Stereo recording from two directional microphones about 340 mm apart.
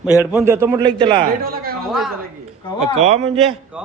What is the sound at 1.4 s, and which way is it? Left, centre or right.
Speech, right.